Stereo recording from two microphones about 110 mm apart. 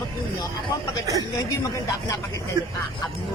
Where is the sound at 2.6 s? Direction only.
30° right (ahead or behind).